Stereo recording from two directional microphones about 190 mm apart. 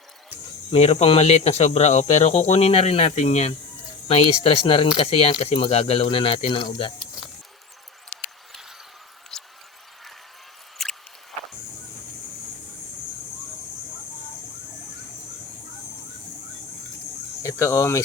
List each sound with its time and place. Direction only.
0.7 s speech: 35° left (ahead or behind)
9.3 s a sound: 5° left (ahead or behind)
10.8 s boat: centre (ahead or behind)
17.4 s speech: 15° left (ahead or behind)